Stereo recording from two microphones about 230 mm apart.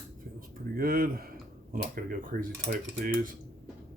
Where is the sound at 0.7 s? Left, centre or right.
Right.